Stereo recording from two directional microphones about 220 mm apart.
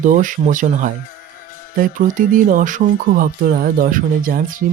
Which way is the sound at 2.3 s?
35° right (ahead or behind).